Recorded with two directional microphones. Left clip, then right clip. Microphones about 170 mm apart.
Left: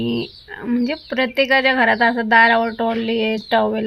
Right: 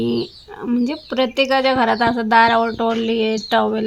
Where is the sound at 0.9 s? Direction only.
15° left (ahead or behind).